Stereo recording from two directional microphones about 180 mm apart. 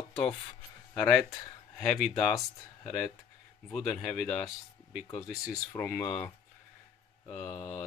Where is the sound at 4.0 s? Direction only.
Centre (ahead or behind).